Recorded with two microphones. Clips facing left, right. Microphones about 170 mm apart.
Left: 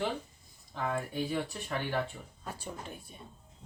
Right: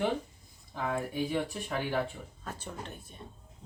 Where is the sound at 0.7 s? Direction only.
10° right (ahead or behind).